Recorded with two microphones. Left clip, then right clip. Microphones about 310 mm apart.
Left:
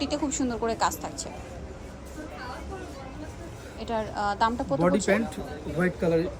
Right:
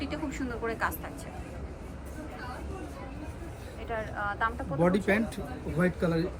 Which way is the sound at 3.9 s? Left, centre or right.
Centre.